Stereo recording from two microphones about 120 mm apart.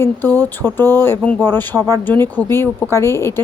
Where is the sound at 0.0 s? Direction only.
15° left (ahead or behind).